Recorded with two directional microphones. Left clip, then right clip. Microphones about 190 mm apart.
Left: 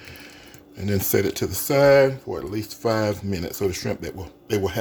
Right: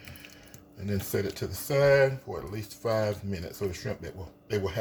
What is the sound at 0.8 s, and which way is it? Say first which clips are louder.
Speech: left 9 dB; 60° left (ahead or behind).